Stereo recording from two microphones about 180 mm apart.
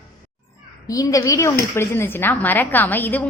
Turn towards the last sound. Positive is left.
turn(degrees=10)  # may be behind; listen again after turning